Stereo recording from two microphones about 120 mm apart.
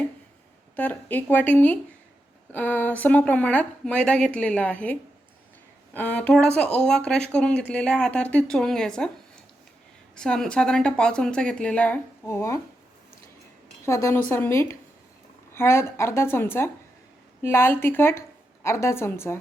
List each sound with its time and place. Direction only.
0.8 s speech: 15° left (ahead or behind)
10.2 s speech: 5° left (ahead or behind); by 12.5 s 20° left (ahead or behind)
13.8 s a woman's voice: 25° left (ahead or behind)